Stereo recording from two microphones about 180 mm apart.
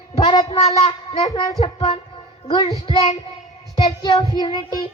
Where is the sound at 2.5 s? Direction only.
25° left (ahead or behind).